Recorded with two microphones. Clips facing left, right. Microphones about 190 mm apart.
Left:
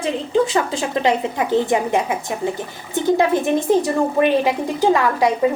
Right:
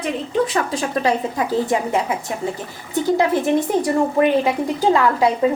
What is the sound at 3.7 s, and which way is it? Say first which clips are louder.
A woman's voice: left 1 dB; 25° left (ahead or behind).